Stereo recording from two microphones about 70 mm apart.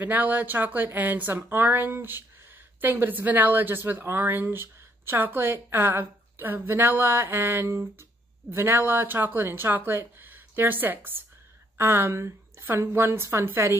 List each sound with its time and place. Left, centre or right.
0.0 s speech: right